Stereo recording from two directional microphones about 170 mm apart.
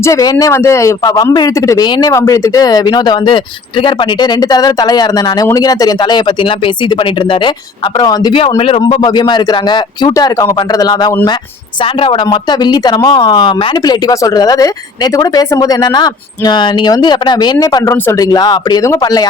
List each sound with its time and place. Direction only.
0.0 s speech: 20° left (ahead or behind)